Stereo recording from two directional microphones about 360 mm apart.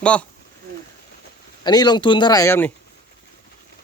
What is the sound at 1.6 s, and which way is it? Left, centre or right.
Speech, centre.